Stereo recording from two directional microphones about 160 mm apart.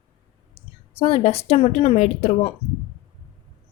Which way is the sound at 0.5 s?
35° left (ahead or behind).